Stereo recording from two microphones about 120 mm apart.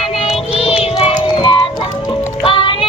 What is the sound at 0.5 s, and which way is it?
Child singing, 50° left (ahead or behind).